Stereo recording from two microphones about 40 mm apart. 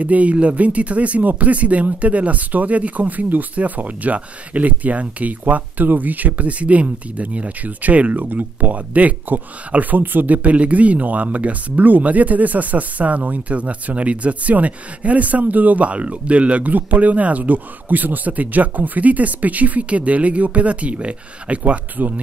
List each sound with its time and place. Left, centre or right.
0.0 s speech: right